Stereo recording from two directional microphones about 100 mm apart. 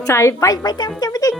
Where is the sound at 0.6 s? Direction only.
45° left (ahead or behind).